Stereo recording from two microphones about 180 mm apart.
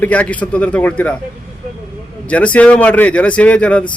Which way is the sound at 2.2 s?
5° left (ahead or behind).